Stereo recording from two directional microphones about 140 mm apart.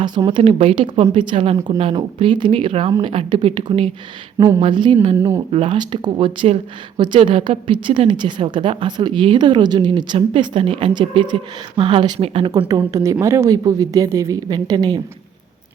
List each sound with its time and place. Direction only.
0.0 s speech: 30° right (ahead or behind)
4.4 s speech: 25° right (ahead or behind)
4.6 s a woman's voice: 35° right (ahead or behind)